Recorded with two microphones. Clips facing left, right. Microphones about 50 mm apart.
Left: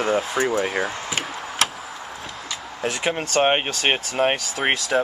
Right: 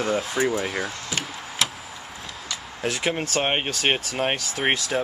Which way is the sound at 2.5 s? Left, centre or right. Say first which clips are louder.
Left 1 dB; centre.